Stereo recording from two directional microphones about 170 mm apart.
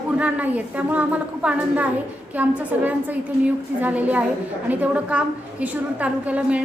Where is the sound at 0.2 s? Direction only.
10° right (ahead or behind).